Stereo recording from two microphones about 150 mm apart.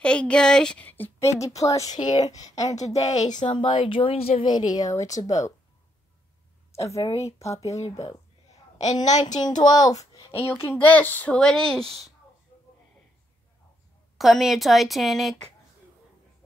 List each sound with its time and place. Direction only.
0.0 s speech: 5° left (ahead or behind); by 2.7 s 25° left (ahead or behind)
2.7 s a woman's voice: 50° left (ahead or behind)
3.4 s speech: 35° left (ahead or behind)
6.7 s a sound: 20° left (ahead or behind)
7.1 s speech: 20° left (ahead or behind)
9.2 s speech: 25° left (ahead or behind); by 12.1 s 5° left (ahead or behind)
14.1 s a woman's voice: centre (ahead or behind)